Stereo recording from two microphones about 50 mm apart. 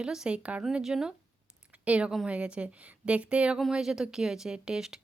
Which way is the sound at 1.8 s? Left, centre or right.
Right.